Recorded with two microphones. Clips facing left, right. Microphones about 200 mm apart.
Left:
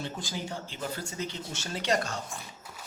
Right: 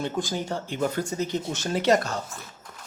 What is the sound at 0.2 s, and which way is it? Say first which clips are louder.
Speech: right 11 dB; 45° right (ahead or behind).